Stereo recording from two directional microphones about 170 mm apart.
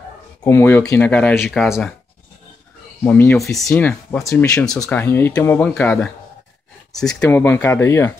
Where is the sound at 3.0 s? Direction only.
10° left (ahead or behind).